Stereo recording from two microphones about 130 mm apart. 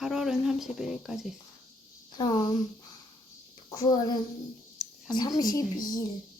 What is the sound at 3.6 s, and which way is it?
Speech, 30° left (ahead or behind).